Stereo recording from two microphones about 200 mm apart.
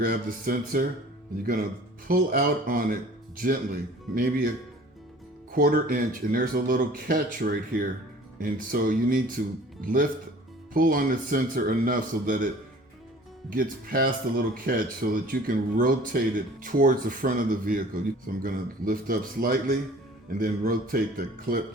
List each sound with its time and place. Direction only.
0.0 s speech: 45° right (ahead or behind)
2.0 s speech: 50° right (ahead or behind)
13.5 s speech: 45° right (ahead or behind)